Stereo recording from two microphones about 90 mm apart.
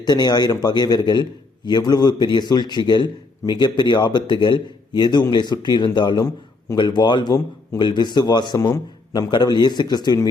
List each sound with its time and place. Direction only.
0.0 s a man's voice: 50° left (ahead or behind)